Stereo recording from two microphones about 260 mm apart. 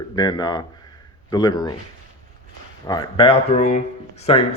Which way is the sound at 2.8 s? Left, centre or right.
Centre.